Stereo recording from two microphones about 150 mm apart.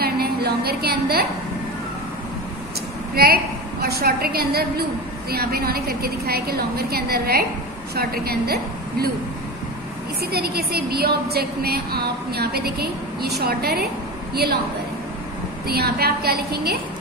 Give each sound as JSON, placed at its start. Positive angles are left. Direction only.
{"t": 0.0, "sound": "a sound", "side_deg": -90}
{"t": 3.2, "sound": "a woman's voice", "side_deg": -90}
{"t": 10.3, "sound": "a woman's voice", "side_deg": -90}
{"t": 15.6, "sound": "a woman's voice", "side_deg": -90}